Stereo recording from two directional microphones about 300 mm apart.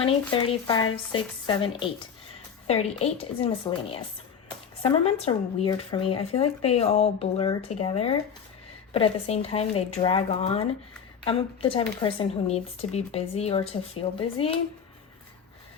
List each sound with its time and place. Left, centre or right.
0.0 s speech: centre